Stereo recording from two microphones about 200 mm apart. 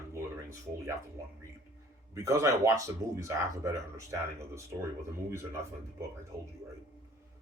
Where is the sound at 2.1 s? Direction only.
15° right (ahead or behind).